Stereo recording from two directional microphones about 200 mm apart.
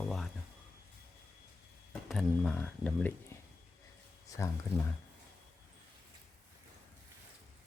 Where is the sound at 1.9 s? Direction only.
Centre (ahead or behind).